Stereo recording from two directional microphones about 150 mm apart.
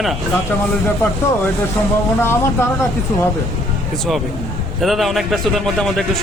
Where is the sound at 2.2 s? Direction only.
15° left (ahead or behind).